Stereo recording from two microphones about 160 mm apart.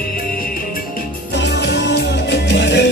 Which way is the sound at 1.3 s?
90° left.